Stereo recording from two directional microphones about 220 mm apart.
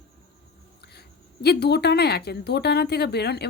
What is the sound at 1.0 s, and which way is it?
Speech, 45° left (ahead or behind).